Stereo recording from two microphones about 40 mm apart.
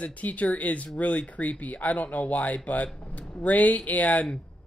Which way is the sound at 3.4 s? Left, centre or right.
Left.